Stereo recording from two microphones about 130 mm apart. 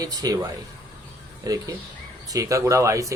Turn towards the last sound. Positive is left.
turn(degrees=-25)  # may be behind; listen again after turning